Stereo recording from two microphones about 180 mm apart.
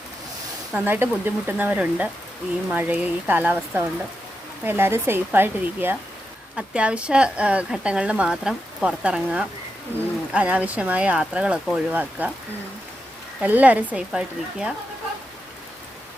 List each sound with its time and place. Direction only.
0.7 s speech: 10° right (ahead or behind)
13.4 s speech: 10° right (ahead or behind)